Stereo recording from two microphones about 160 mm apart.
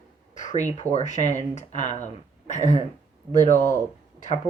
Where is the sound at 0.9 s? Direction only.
50° left (ahead or behind).